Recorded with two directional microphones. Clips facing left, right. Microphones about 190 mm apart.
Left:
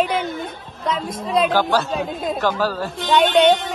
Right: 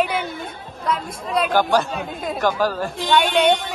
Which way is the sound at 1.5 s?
15° right (ahead or behind).